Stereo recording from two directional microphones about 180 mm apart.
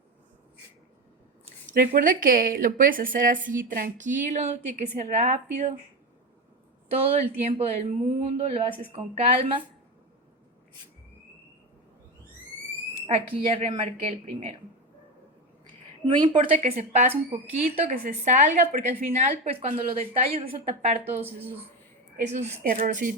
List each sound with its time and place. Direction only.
1.7 s speech: 50° right (ahead or behind)
6.9 s speech: 35° right (ahead or behind)
13.1 s speech: 30° right (ahead or behind)
13.6 s speech: 40° right (ahead or behind)
15.6 s a sound: 25° right (ahead or behind)
16.5 s speech: 35° right (ahead or behind)
19.1 s speech: 35° right (ahead or behind)
22.6 s speech: 50° right (ahead or behind)